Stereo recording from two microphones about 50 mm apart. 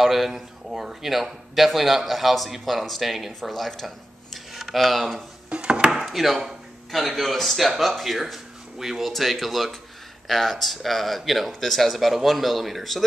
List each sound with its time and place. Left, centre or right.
0.0 s speech: centre
5.5 s chopping: centre
5.9 s speech: centre